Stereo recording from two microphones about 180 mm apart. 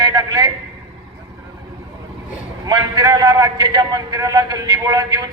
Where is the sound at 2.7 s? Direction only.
20° right (ahead or behind).